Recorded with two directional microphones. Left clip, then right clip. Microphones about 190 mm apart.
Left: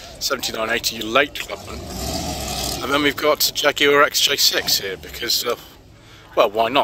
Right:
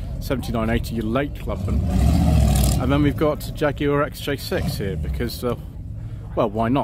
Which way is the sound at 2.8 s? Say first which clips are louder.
Left 4 dB; centre (ahead or behind).